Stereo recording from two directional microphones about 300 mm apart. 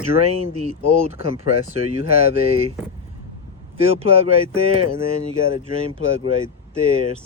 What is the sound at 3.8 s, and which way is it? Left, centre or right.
Speech, centre.